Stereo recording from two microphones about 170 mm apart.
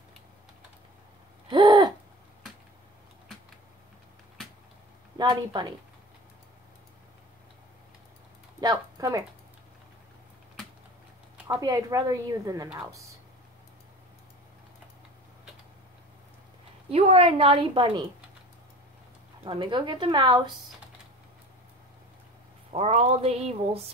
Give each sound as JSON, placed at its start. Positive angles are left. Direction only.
{"t": 1.5, "sound": "owl", "side_deg": -25}
{"t": 5.1, "sound": "a woman's voice", "side_deg": -25}
{"t": 8.5, "sound": "typing", "side_deg": -20}
{"t": 11.4, "sound": "a woman's voice", "side_deg": -20}
{"t": 16.9, "sound": "speech", "side_deg": -35}
{"t": 19.4, "sound": "a woman's voice", "side_deg": -30}
{"t": 22.7, "sound": "speech", "side_deg": -40}